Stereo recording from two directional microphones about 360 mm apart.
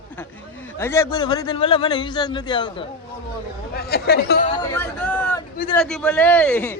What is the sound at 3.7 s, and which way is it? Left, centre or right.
Speech, left.